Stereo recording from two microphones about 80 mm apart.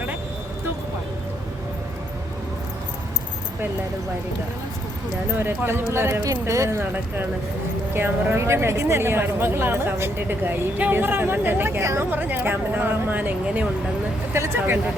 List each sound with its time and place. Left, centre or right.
5.4 s speech: right
7.9 s speech: right
11.8 s speech: right
12.1 s speech: right
14.3 s speech: right